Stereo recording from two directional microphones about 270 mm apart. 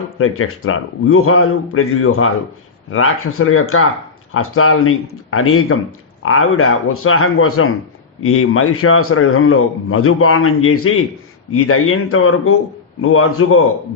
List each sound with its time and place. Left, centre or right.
0.2 s a man's voice: left